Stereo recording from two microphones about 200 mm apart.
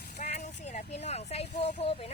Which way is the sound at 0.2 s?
35° left (ahead or behind).